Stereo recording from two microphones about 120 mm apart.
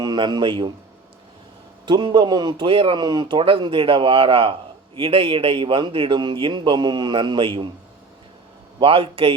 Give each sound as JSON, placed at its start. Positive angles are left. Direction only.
{"t": 0.0, "sound": "a man's voice", "side_deg": -35}
{"t": 1.9, "sound": "a man's voice", "side_deg": -40}
{"t": 8.8, "sound": "a man's voice", "side_deg": -50}